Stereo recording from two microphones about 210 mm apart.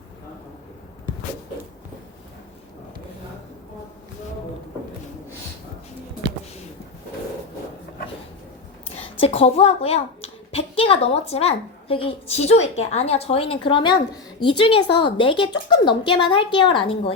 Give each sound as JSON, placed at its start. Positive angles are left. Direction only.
{"t": 9.1, "sound": "a child's voice", "side_deg": 30}